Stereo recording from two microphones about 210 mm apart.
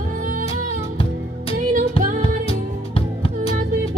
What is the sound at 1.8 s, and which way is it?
Music, 40° right (ahead or behind).